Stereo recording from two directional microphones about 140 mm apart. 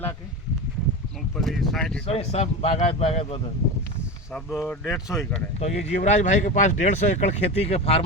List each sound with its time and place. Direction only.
1.4 s speech: centre (ahead or behind)
2.0 s speech: 50° left (ahead or behind)
4.4 s speech: centre (ahead or behind)
4.9 s speech: 20° left (ahead or behind)
5.5 s speech: 55° left (ahead or behind)